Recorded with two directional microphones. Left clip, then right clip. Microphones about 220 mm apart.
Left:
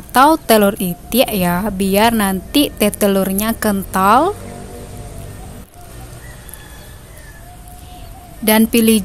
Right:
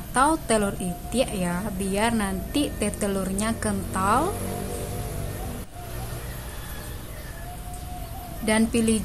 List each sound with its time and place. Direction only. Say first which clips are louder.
0.1 s a woman's voice: left 11 dB; 45° left (ahead or behind)
8.5 s a woman's voice: left 10 dB; 45° left (ahead or behind)